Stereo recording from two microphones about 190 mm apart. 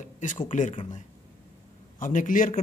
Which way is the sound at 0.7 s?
30° left (ahead or behind).